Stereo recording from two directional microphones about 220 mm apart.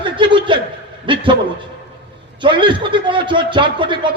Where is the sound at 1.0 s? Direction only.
20° right (ahead or behind).